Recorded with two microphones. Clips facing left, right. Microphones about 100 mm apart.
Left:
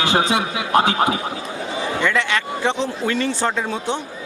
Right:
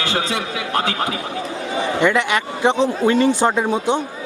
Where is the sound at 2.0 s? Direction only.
15° right (ahead or behind).